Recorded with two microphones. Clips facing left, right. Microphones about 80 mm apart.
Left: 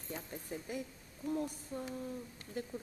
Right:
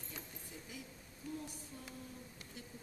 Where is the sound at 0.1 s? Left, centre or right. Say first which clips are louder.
Left 11 dB; left.